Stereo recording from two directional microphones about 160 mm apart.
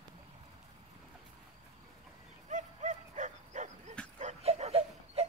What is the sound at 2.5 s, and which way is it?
Dog, 50° right (ahead or behind).